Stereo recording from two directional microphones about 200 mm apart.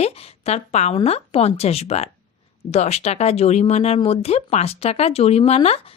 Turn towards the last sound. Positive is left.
turn(degrees=30)  # may be behind; listen again after turning